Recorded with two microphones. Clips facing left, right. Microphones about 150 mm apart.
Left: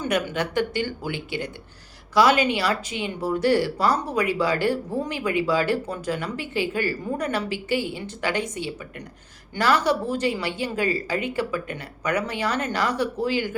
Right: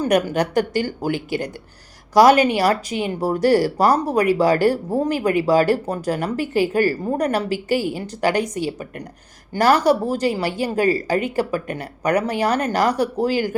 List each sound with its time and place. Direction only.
0.0 s speech: 40° right (ahead or behind)